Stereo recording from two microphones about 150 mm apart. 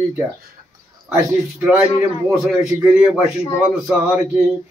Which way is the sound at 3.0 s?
20° right (ahead or behind).